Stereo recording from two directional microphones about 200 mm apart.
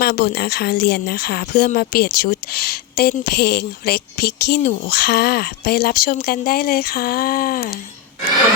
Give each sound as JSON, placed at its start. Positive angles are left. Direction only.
{"t": 0.0, "sound": "speech", "side_deg": 55}